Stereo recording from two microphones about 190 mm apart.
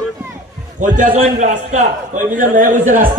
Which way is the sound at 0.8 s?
40° right (ahead or behind).